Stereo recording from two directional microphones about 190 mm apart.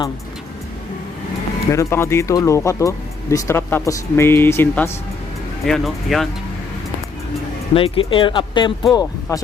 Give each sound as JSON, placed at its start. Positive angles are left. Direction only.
{"t": 1.7, "sound": "speech", "side_deg": 15}
{"t": 7.7, "sound": "speech", "side_deg": 30}